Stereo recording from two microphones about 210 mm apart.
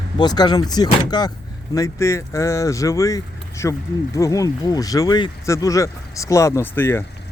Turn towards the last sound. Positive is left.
turn(degrees=10)  # may be behind; listen again after turning